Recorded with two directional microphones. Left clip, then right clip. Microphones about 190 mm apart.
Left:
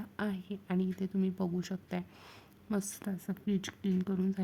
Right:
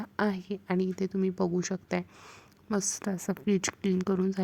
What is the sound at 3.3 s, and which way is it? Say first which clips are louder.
Speech: right 9 dB; 35° right (ahead or behind).